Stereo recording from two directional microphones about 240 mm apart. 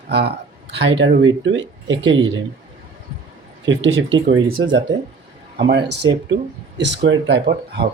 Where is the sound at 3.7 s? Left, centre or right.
Right.